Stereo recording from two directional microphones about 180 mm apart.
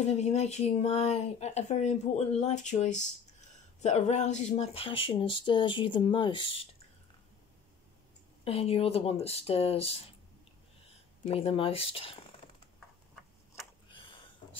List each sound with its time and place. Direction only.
0.0 s speech: 40° left (ahead or behind)
8.5 s speech: 35° left (ahead or behind)
11.2 s speech: 35° left (ahead or behind)
13.8 s a sound: 30° left (ahead or behind)